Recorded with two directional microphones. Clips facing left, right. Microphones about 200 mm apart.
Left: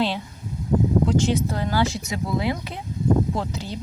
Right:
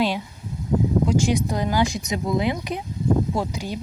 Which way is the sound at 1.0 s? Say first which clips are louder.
Even; 10° right (ahead or behind).